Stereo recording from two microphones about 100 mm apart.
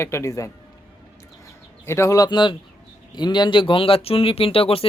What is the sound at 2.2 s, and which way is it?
Speech, 50° left (ahead or behind).